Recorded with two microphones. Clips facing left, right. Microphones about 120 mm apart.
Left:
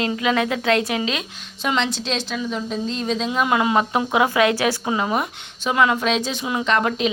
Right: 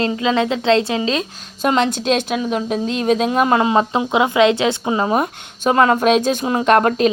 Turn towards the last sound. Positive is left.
turn(degrees=-50)  # may be behind; listen again after turning